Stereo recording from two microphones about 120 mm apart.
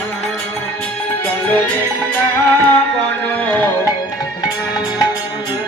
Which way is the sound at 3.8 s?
35° left (ahead or behind).